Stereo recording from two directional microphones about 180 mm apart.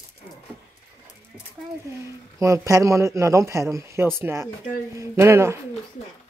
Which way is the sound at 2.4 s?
15° right (ahead or behind).